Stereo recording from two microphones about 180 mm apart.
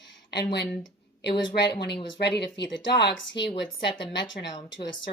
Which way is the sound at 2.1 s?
70° left (ahead or behind).